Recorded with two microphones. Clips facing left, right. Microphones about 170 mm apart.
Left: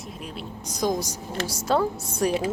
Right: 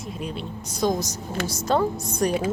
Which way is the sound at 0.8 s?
10° left (ahead or behind).